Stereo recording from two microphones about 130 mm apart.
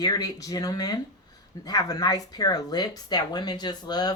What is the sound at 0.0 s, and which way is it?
A woman's voice, 30° left (ahead or behind).